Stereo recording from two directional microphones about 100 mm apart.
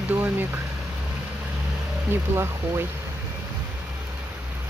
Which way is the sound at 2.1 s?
25° right (ahead or behind).